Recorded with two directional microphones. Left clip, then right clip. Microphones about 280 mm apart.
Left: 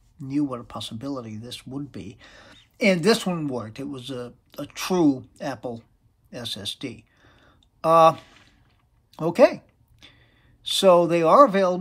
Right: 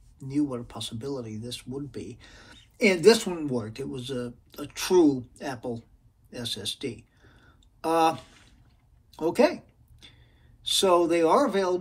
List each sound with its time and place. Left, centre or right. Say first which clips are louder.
0.3 s speech: left 2 dB; left
7.2 s a sound: left 2 dB; left
10.6 s speech: left 5 dB; left